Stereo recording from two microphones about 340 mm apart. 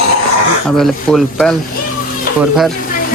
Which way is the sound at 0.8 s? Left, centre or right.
Centre.